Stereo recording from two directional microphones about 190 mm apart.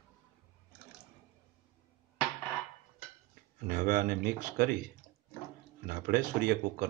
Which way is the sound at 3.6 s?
50° right (ahead or behind).